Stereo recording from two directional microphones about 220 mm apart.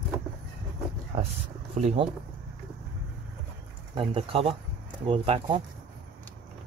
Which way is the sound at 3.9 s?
25° right (ahead or behind).